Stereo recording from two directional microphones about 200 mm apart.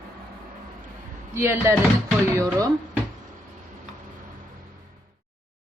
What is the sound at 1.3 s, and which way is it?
Speech, 15° right (ahead or behind).